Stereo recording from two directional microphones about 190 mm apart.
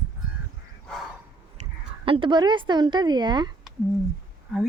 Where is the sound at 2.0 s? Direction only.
25° right (ahead or behind).